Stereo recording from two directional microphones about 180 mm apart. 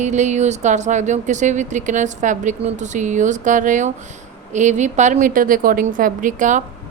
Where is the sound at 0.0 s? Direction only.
40° right (ahead or behind).